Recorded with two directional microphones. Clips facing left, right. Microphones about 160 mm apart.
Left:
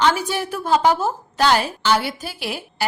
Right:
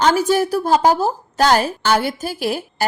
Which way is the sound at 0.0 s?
45° right (ahead or behind).